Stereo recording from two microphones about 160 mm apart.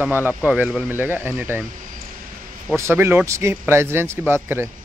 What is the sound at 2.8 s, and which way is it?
Speech, 15° right (ahead or behind).